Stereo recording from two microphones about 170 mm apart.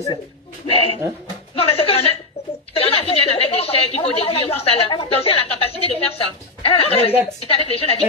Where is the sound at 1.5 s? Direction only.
35° left (ahead or behind).